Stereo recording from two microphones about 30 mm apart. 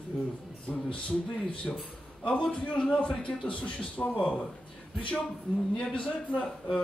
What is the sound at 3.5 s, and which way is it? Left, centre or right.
Speech, left.